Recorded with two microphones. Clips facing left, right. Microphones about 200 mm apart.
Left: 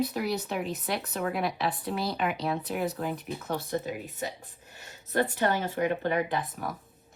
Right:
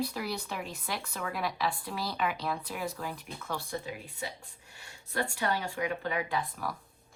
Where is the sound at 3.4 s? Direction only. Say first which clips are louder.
Left 4 dB; 20° left (ahead or behind).